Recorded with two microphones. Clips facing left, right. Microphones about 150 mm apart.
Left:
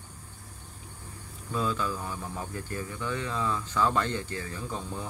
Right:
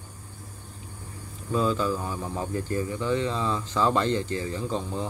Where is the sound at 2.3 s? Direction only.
30° right (ahead or behind).